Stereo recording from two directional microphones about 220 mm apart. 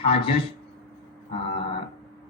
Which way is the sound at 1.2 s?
25° left (ahead or behind).